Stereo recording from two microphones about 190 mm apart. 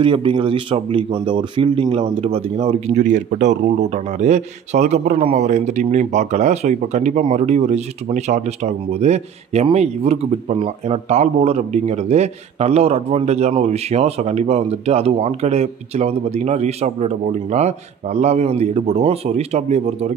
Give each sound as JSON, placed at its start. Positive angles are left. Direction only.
{"t": 0.0, "sound": "speech", "side_deg": -25}